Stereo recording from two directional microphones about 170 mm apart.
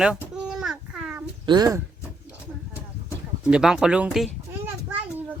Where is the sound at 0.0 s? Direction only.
5° right (ahead or behind).